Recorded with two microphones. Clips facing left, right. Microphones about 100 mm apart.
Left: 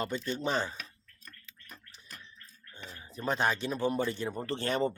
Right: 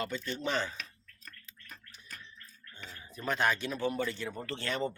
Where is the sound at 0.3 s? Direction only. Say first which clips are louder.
Left 2 dB; 30° left (ahead or behind).